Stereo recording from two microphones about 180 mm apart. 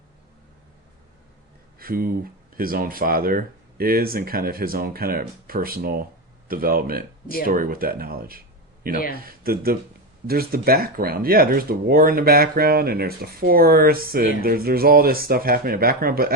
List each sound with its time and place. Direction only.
1.8 s speech: 55° right (ahead or behind)